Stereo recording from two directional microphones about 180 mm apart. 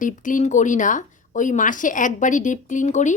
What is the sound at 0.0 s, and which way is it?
A woman's voice, 45° left (ahead or behind).